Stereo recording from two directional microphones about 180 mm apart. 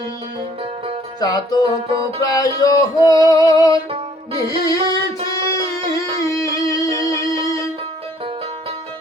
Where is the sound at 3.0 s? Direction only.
20° left (ahead or behind).